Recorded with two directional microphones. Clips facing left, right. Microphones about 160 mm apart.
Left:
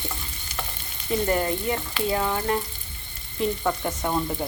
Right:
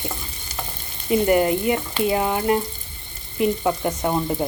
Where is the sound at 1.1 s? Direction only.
15° right (ahead or behind).